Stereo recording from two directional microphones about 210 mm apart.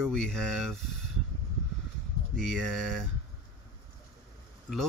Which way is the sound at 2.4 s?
Centre (ahead or behind).